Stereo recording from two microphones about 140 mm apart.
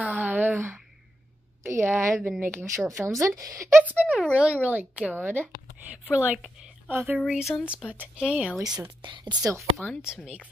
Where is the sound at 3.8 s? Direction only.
10° right (ahead or behind).